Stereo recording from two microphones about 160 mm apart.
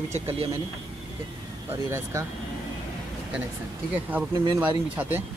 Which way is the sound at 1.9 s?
20° right (ahead or behind).